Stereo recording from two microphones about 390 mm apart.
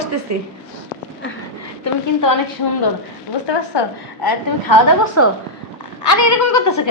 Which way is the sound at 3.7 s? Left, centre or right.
Left.